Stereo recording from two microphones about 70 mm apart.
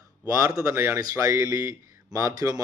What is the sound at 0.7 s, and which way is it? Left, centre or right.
Speech, right.